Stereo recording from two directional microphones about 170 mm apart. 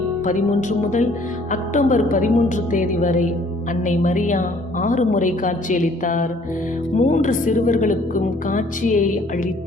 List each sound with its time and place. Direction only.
0.3 s a woman's voice: 45° left (ahead or behind)